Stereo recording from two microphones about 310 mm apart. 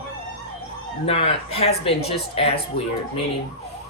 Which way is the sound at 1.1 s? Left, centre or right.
Centre.